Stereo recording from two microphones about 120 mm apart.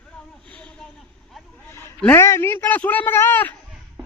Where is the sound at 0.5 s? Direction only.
10° left (ahead or behind).